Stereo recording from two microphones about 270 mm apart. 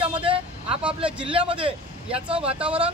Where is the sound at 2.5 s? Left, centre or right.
Centre.